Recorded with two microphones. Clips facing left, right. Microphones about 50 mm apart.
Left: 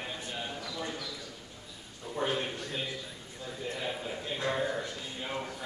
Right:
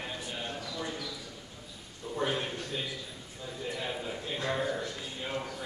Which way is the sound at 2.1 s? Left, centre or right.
Centre.